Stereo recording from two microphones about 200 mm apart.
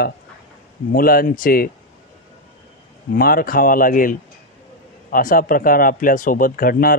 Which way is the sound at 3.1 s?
45° left (ahead or behind).